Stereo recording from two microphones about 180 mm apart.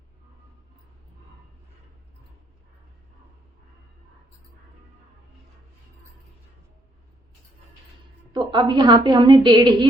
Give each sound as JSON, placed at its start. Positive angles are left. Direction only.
{"t": 8.4, "sound": "a woman's voice", "side_deg": -25}